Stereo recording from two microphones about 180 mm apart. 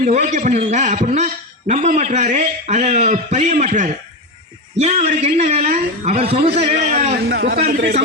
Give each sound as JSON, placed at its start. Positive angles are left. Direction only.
{"t": 0.0, "sound": "a man's voice", "side_deg": -40}
{"t": 7.3, "sound": "a man's voice", "side_deg": -75}